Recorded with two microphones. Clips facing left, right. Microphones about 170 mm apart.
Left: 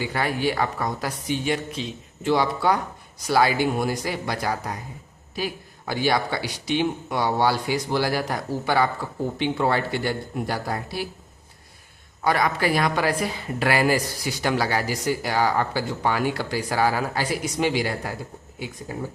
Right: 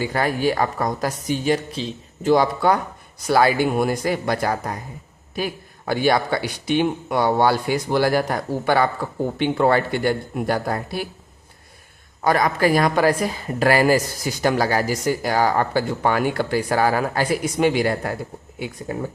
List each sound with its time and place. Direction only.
0.0 s a woman's voice: 45° right (ahead or behind)
5.9 s a woman's voice: 55° right (ahead or behind)
12.2 s a woman's voice: 45° right (ahead or behind)